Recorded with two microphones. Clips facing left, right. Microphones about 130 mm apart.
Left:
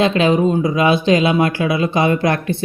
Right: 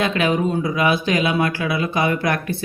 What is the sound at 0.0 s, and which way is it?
Speech, 25° left (ahead or behind).